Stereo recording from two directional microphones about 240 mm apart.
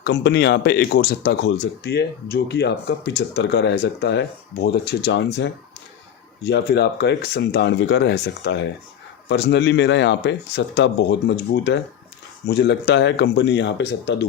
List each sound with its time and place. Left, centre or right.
0.0 s speech: left